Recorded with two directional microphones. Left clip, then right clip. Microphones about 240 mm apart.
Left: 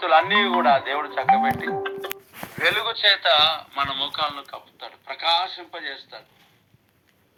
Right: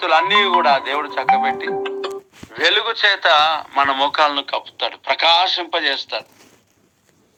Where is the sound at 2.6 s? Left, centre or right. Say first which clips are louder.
Right 6 dB; right.